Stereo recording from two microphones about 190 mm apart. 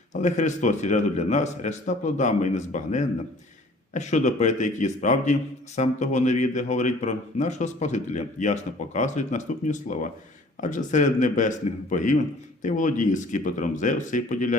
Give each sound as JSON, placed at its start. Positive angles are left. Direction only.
{"t": 0.1, "sound": "a man's voice", "side_deg": 40}